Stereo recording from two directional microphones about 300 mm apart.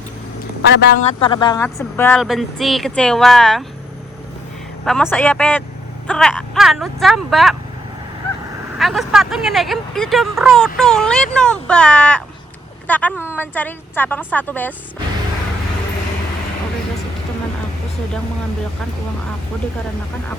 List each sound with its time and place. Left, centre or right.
0.6 s speech: left
1.0 s speech: centre
4.9 s speech: centre
8.8 s a woman's voice: centre